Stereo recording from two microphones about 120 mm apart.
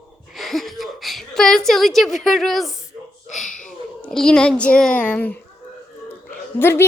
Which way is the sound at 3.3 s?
90° left.